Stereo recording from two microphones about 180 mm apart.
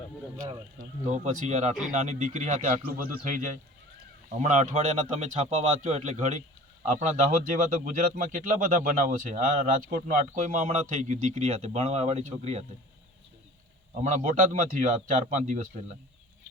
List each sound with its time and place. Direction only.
0.8 s speech: 45° right (ahead or behind)
7.3 s speech: 45° right (ahead or behind)
14.0 s speech: 45° right (ahead or behind)